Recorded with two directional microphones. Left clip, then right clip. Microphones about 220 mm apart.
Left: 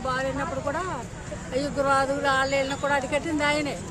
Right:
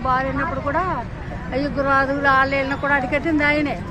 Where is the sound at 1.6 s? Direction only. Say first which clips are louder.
Right 4 dB; 20° left (ahead or behind).